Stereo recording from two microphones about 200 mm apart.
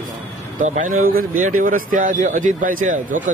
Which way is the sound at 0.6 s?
40° right (ahead or behind).